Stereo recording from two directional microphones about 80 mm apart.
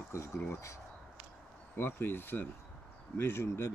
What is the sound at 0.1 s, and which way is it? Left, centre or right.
Speech, left.